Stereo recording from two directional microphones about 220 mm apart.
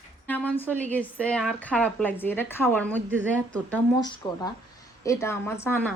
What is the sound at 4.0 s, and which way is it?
A woman's voice, 20° left (ahead or behind).